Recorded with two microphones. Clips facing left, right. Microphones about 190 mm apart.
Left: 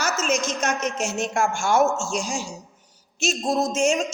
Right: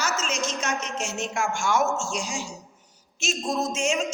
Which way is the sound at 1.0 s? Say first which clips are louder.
Left 5 dB; 40° left (ahead or behind).